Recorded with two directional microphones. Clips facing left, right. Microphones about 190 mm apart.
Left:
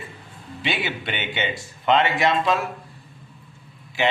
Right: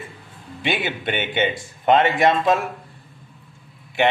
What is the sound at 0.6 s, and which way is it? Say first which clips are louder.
A man's voice: right 3 dB; 50° right (ahead or behind).